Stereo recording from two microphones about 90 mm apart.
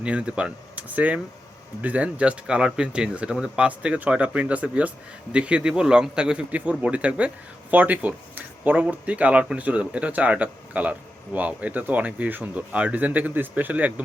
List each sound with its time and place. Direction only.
0.0 s speech: 10° right (ahead or behind)